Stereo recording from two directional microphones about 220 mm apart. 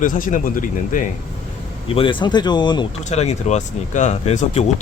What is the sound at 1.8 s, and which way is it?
Speech, 25° left (ahead or behind).